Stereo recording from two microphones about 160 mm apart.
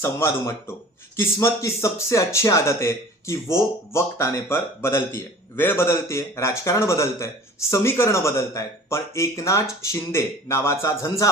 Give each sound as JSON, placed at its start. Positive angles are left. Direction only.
{"t": 0.0, "sound": "speech", "side_deg": 15}